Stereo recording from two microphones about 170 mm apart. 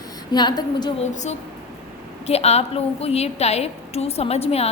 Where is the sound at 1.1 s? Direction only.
45° left (ahead or behind).